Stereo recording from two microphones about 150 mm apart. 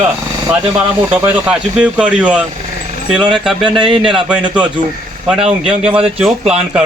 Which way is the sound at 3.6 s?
35° right (ahead or behind).